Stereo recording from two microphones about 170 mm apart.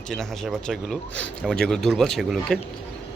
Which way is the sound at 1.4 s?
5° left (ahead or behind).